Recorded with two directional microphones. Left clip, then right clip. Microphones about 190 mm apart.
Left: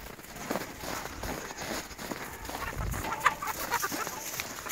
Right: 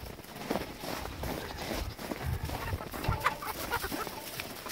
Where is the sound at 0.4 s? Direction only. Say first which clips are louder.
Even; centre (ahead or behind).